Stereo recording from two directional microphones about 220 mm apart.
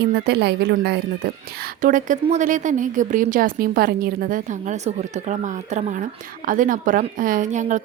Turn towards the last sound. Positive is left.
turn(degrees=-35)  # may be behind; listen again after turning